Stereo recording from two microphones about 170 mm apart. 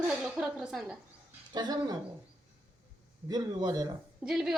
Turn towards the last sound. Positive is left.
turn(degrees=0)  # may be behind; listen again after turning